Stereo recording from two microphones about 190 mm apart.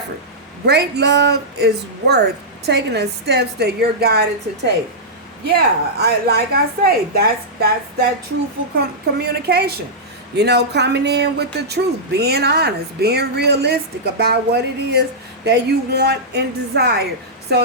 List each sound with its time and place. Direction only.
0.6 s speech: 60° right (ahead or behind)
9.1 s speech: 60° right (ahead or behind)